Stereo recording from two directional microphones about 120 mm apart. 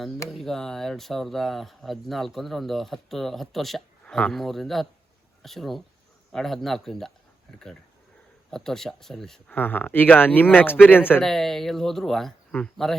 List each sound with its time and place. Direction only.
0.3 s speech: centre (ahead or behind)
8.4 s speech: 5° left (ahead or behind)
9.5 s speech: 15° left (ahead or behind)
11.2 s speech: centre (ahead or behind)